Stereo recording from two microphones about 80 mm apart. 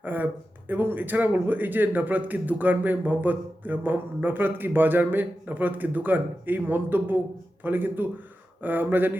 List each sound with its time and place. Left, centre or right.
0.0 s a man's voice: right